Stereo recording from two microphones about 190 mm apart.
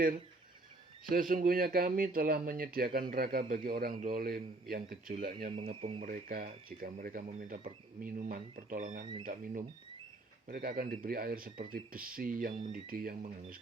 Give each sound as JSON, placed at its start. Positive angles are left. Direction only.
{"t": 1.0, "sound": "speech", "side_deg": -45}
{"t": 5.8, "sound": "speech", "side_deg": -30}
{"t": 6.1, "sound": "speech", "side_deg": -45}